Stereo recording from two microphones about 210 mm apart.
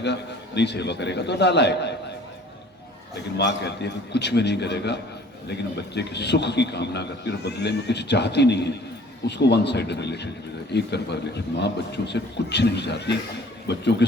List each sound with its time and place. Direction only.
0.0 s a man's voice: 55° left (ahead or behind)
3.3 s a man's voice: 55° left (ahead or behind)